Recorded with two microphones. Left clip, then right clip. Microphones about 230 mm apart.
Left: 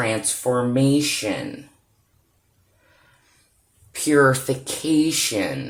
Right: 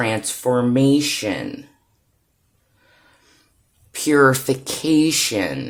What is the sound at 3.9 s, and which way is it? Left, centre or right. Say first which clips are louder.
Speech: right 2 dB; right.